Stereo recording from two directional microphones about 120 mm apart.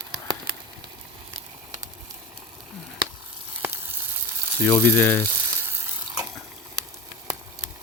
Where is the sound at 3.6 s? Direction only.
20° right (ahead or behind).